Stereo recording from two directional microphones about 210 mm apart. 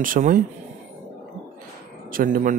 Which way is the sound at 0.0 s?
40° right (ahead or behind).